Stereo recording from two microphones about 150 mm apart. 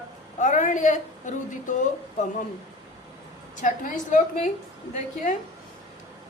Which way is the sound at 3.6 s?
60° left (ahead or behind).